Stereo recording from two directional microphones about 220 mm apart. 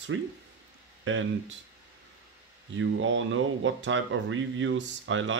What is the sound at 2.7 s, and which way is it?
Speech, 60° right (ahead or behind).